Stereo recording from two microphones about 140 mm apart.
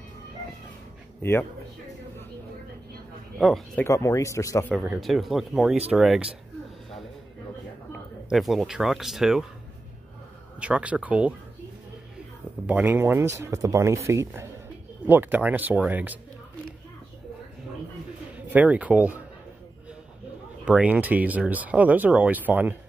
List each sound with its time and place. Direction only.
3.3 s speech: centre (ahead or behind)
3.8 s speech: 20° left (ahead or behind)
5.0 s speech: centre (ahead or behind)
8.3 s speech: centre (ahead or behind)
10.6 s speech: 10° right (ahead or behind)
12.6 s speech: 15° right (ahead or behind)
18.3 s speech: 10° right (ahead or behind)
20.6 s speech: 10° right (ahead or behind)